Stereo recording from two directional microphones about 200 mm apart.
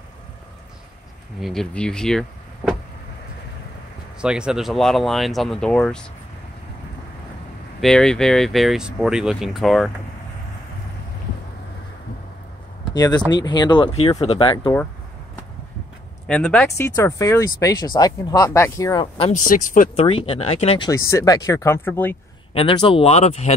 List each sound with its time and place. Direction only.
1.4 s speech: centre (ahead or behind)
4.2 s speech: 5° right (ahead or behind)
7.8 s speech: 5° left (ahead or behind)
12.9 s speech: 20° left (ahead or behind)
16.3 s speech: 5° left (ahead or behind)
16.7 s speech: 15° left (ahead or behind)
19.3 s speech: 40° left (ahead or behind)
20.1 s speech: 30° left (ahead or behind)
20.9 s speech: 15° left (ahead or behind)
22.5 s speech: 25° left (ahead or behind)